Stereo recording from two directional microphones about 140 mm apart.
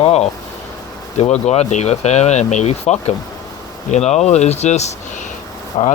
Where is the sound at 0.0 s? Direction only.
50° left (ahead or behind).